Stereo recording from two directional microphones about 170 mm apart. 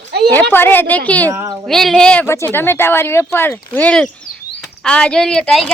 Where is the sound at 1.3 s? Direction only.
20° right (ahead or behind).